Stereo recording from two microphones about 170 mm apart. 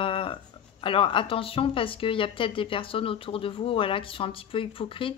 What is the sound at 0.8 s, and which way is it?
A woman's voice, 30° left (ahead or behind).